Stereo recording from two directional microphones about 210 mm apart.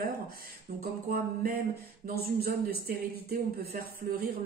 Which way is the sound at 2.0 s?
45° right (ahead or behind).